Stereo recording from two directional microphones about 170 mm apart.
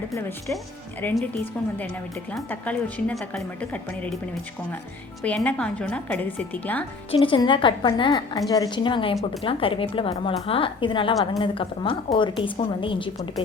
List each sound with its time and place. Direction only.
0.1 s a woman's voice: 15° left (ahead or behind)
5.2 s a woman's voice: 10° left (ahead or behind)
7.1 s a woman's voice: 30° left (ahead or behind)